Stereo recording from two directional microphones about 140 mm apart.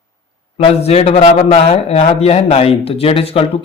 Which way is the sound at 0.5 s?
45° left (ahead or behind).